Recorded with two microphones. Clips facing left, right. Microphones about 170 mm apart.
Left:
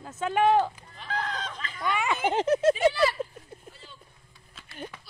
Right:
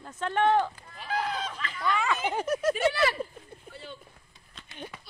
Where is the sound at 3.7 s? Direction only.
65° right (ahead or behind).